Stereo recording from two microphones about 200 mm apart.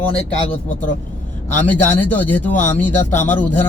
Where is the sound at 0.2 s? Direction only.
35° left (ahead or behind).